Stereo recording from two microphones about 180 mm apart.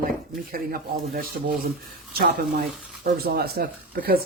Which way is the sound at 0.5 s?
55° right (ahead or behind).